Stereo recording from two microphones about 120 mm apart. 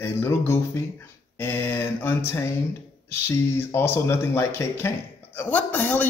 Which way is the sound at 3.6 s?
20° left (ahead or behind).